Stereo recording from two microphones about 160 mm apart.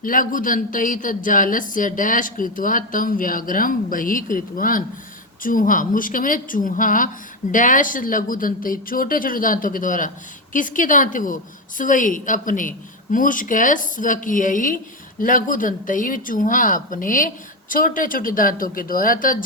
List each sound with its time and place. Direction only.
0.0 s a man's voice: 60° left (ahead or behind)